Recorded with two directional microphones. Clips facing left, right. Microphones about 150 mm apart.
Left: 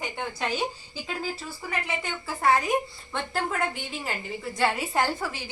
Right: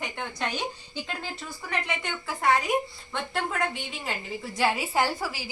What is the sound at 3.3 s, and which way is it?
A woman's voice, 5° left (ahead or behind).